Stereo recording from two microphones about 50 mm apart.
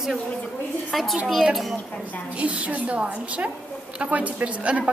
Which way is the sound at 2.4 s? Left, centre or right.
Right.